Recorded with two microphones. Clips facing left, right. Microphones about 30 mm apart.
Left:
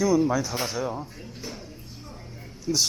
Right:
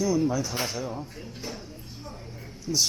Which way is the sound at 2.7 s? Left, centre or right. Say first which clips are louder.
Left 2 dB; centre.